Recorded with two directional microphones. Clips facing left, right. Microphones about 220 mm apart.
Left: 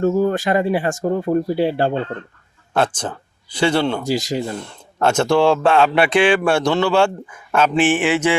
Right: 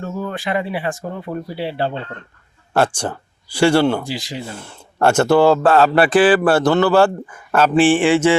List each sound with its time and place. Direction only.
0.0 s speech: 45° left (ahead or behind)
2.7 s speech: 10° right (ahead or behind)
4.0 s speech: 45° left (ahead or behind)
4.5 s speech: 5° right (ahead or behind)
7.9 s a sound: 10° left (ahead or behind)